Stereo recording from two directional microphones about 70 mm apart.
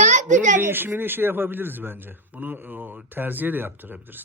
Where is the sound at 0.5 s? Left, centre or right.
Right.